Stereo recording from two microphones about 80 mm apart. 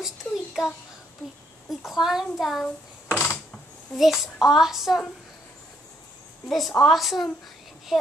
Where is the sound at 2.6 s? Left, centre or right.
Centre.